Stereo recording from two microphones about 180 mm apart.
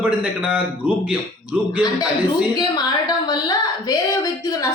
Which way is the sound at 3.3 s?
20° left (ahead or behind).